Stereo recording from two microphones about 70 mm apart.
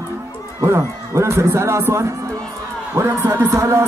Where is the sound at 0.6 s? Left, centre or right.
Right.